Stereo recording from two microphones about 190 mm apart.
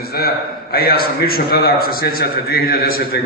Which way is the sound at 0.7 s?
55° left (ahead or behind).